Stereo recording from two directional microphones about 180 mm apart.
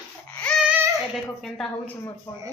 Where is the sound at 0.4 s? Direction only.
5° left (ahead or behind).